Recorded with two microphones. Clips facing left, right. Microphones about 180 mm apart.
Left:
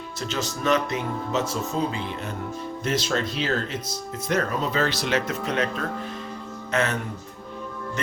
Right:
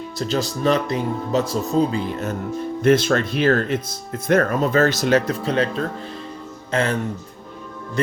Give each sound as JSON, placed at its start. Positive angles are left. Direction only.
{"t": 0.2, "sound": "speech", "side_deg": -35}
{"t": 2.8, "sound": "speech", "side_deg": -55}